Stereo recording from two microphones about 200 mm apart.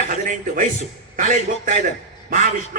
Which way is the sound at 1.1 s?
40° right (ahead or behind).